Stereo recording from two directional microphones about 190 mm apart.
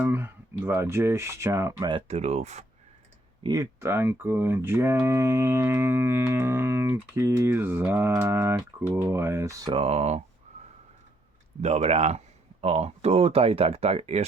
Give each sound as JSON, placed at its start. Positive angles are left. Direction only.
{"t": 0.0, "sound": "speech", "side_deg": -10}
{"t": 1.9, "sound": "speech", "side_deg": -30}
{"t": 3.4, "sound": "speech", "side_deg": -20}
{"t": 10.5, "sound": "snort", "side_deg": -35}
{"t": 11.6, "sound": "speech", "side_deg": -35}